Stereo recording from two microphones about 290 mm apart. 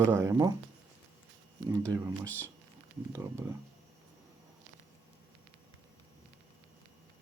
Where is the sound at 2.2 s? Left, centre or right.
Centre.